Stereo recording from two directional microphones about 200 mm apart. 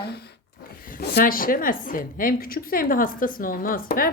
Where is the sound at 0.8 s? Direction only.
45° left (ahead or behind).